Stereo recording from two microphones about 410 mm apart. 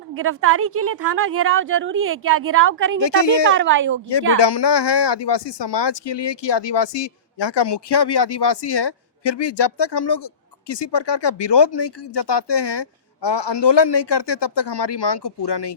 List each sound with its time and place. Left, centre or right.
0.1 s a woman's voice: right
3.0 s speech: left
3.5 s a woman's voice: right
4.4 s speech: left